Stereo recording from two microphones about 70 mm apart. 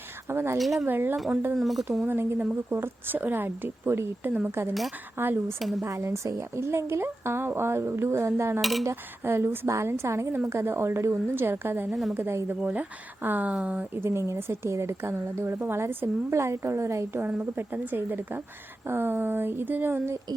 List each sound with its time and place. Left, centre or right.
0.3 s a woman's voice: right
0.6 s speech: centre
0.9 s a woman's voice: right
1.1 s speech: centre
2.0 s a woman's voice: right
5.5 s speech: centre
5.8 s a woman's voice: right; by 13.8 s centre
13.9 s a woman's voice: right
17.4 s a woman's voice: right